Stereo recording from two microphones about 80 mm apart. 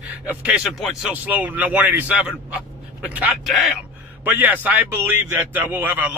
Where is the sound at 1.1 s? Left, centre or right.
Centre.